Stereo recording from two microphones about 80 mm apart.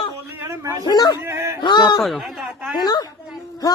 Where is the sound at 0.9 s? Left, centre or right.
Left.